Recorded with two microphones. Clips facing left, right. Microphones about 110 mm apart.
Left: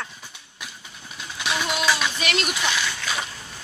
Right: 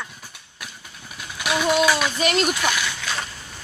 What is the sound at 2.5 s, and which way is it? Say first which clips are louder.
Speech: right 2 dB; 5° right (ahead or behind).